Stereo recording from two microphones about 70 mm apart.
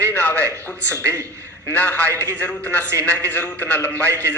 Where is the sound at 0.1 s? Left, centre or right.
Left.